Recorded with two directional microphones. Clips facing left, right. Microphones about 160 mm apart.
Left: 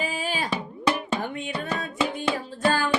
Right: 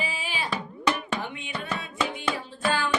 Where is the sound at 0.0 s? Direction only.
45° left (ahead or behind).